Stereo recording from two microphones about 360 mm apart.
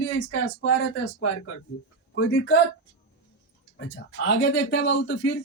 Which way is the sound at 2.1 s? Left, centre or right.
Left.